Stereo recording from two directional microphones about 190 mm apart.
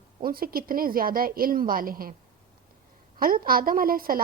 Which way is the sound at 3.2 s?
50° right (ahead or behind).